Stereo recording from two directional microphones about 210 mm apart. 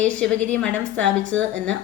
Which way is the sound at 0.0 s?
5° left (ahead or behind).